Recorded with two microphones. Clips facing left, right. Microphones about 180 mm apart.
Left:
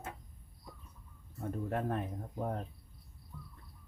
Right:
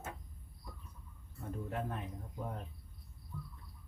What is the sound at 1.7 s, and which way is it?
Speech, 55° left (ahead or behind).